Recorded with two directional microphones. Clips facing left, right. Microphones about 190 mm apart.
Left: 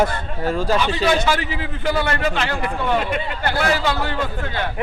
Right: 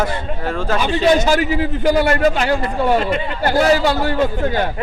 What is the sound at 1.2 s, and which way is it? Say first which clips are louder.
A man's voice: right 6 dB; 40° right (ahead or behind).